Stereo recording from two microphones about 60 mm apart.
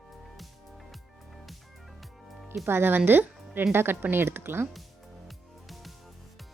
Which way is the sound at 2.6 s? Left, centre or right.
Right.